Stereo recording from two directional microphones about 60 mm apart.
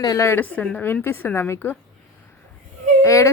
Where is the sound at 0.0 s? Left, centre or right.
Left.